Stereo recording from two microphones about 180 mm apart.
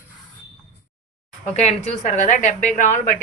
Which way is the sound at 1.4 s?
40° left (ahead or behind).